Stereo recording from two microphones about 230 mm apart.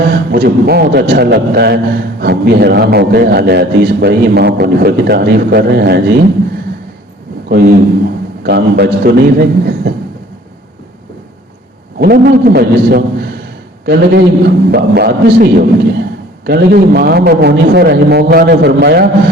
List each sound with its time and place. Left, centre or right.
0.1 s a man's voice: right
8.4 s a man's voice: right
11.9 s a man's voice: right